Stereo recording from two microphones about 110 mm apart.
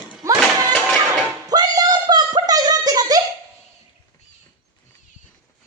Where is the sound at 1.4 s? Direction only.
35° right (ahead or behind).